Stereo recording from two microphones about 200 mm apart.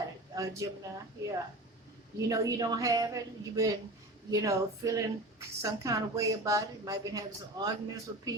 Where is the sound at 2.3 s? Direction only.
15° right (ahead or behind).